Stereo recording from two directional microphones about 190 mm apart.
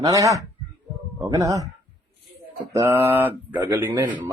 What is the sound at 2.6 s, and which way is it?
Speech, 15° right (ahead or behind).